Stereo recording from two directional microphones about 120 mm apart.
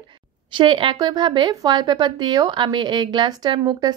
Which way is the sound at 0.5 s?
45° right (ahead or behind).